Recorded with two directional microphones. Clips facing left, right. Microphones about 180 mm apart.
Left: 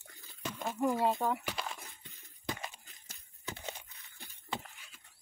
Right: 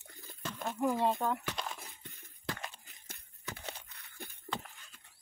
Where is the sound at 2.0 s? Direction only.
60° right (ahead or behind).